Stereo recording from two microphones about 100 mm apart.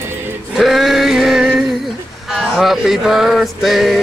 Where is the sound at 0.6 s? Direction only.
Centre (ahead or behind).